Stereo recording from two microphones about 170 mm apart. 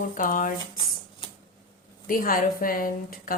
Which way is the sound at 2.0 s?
55° left (ahead or behind).